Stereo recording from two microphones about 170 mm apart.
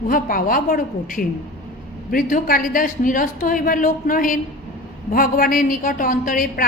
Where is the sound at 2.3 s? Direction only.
55° left (ahead or behind).